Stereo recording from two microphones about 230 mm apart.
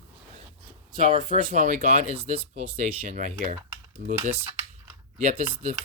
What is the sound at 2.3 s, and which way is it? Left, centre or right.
Speech, right.